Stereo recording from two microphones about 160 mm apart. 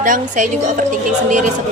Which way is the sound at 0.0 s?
55° right (ahead or behind).